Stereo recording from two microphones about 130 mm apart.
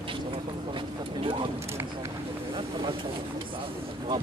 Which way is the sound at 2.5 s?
40° right (ahead or behind).